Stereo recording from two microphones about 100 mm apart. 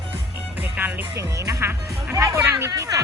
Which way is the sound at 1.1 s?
35° right (ahead or behind).